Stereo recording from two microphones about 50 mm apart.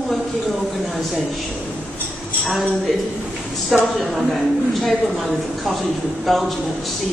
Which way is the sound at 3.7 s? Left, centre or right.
Centre.